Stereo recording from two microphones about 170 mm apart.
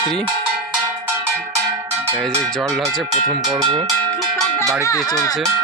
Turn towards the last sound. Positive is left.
turn(degrees=-25)  # may be behind; listen again after turning